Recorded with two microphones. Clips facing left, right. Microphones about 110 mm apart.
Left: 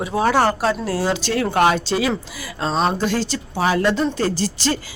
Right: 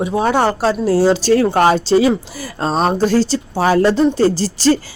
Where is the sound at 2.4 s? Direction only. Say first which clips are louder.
Right 3 dB; 40° right (ahead or behind).